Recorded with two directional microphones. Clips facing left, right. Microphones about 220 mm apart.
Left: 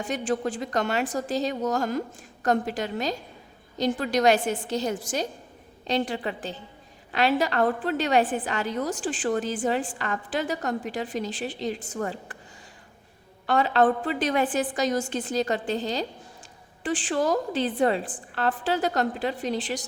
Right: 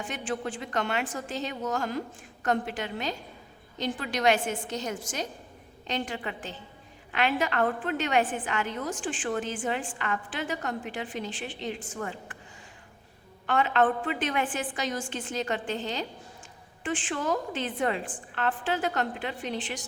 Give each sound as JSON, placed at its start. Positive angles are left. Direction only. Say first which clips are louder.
{"t": 0.0, "sound": "a woman's voice", "louder": "left 6 dB", "side_deg": 40}
{"t": 13.5, "sound": "a woman's voice", "louder": "left 3 dB", "side_deg": 35}